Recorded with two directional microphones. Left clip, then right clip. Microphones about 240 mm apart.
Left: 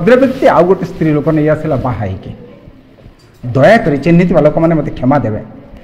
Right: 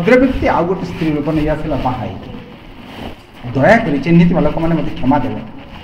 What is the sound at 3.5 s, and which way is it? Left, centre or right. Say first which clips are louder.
Speech: left 4 dB; left.